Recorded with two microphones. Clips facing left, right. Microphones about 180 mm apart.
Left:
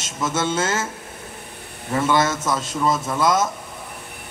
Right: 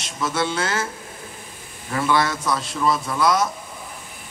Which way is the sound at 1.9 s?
20° left (ahead or behind).